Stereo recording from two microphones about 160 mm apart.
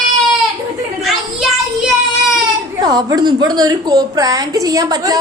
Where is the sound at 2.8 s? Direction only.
25° right (ahead or behind).